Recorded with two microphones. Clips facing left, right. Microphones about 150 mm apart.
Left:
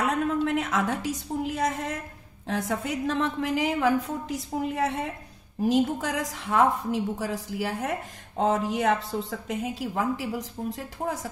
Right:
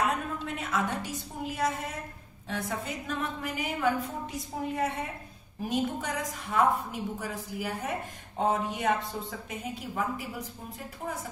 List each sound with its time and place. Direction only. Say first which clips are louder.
0.5 s a woman's voice: left 5 dB; 90° left